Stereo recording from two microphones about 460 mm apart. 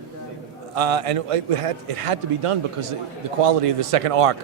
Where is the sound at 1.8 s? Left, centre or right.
Right.